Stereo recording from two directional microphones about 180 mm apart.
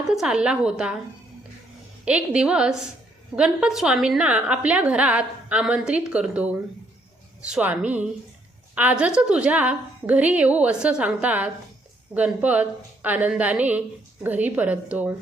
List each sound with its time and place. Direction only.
0.1 s a woman's voice: 5° right (ahead or behind)
2.0 s a woman's voice: 5° right (ahead or behind)